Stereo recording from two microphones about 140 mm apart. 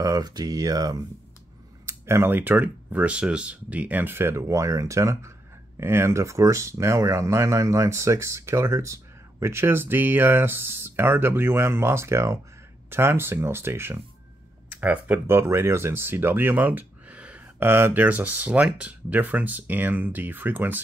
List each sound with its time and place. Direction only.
0.0 s speech: 25° right (ahead or behind)